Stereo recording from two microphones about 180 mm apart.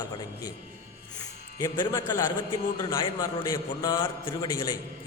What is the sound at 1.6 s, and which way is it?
A man's voice, 25° left (ahead or behind).